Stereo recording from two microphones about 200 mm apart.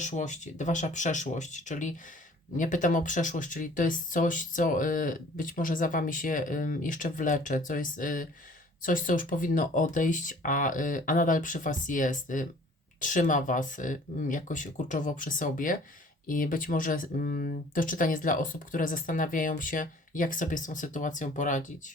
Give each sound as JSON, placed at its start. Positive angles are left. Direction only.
{"t": 0.0, "sound": "speech", "side_deg": 35}